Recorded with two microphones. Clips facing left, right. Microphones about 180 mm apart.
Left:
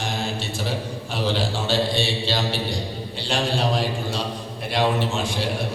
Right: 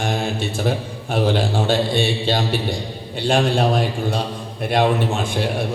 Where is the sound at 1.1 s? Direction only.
55° right (ahead or behind).